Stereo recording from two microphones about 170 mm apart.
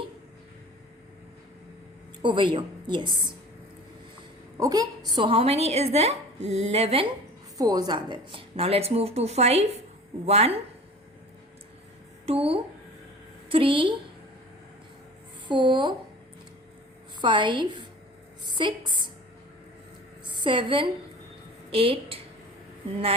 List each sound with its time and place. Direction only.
2.2 s a woman's voice: 30° right (ahead or behind)
4.5 s a woman's voice: 20° right (ahead or behind)
7.6 s a woman's voice: 20° right (ahead or behind)
12.2 s a woman's voice: 35° right (ahead or behind)
15.4 s a woman's voice: 30° right (ahead or behind)
17.2 s a woman's voice: 30° right (ahead or behind)
20.4 s a woman's voice: 30° right (ahead or behind)